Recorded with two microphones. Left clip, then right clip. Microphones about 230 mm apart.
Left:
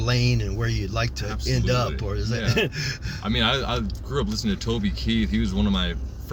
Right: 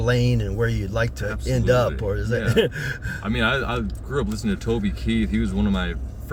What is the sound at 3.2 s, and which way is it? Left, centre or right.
Speech, centre.